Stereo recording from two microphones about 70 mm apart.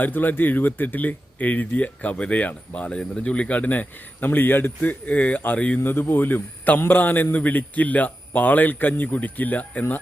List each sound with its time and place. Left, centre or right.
0.0 s speech: left
5.8 s speech: left